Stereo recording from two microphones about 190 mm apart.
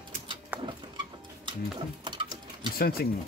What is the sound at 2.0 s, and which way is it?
Sewing machine, 25° right (ahead or behind).